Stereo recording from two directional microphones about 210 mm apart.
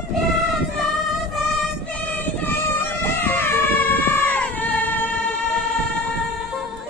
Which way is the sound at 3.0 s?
10° left (ahead or behind).